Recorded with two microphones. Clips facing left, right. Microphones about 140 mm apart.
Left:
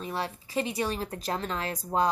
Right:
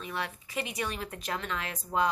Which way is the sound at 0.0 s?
35° left (ahead or behind).